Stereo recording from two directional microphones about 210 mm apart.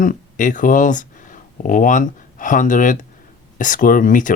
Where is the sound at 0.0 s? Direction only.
40° left (ahead or behind).